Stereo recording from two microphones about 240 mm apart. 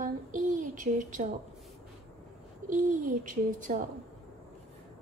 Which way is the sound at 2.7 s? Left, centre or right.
Right.